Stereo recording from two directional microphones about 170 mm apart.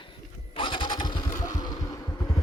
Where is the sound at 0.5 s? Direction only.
30° left (ahead or behind).